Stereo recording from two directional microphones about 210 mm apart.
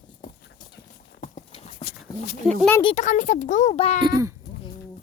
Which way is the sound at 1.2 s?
30° left (ahead or behind).